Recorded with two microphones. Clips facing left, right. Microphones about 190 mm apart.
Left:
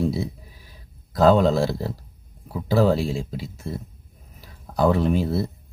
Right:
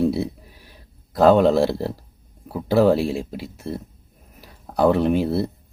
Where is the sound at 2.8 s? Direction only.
65° right (ahead or behind).